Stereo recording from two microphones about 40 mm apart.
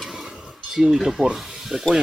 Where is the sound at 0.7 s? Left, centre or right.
Centre.